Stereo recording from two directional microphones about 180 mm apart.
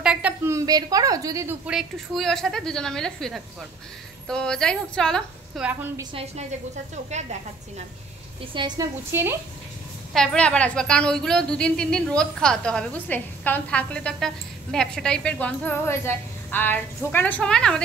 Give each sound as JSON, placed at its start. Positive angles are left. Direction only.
{"t": 0.0, "sound": "a sound", "side_deg": -5}
{"t": 1.7, "sound": "a woman's voice", "side_deg": 0}
{"t": 5.7, "sound": "a woman's voice", "side_deg": -10}
{"t": 7.1, "sound": "speech", "side_deg": -40}
{"t": 8.5, "sound": "a woman's voice", "side_deg": -25}
{"t": 9.1, "sound": "a woman's voice", "side_deg": -15}
{"t": 10.1, "sound": "a woman's voice", "side_deg": 5}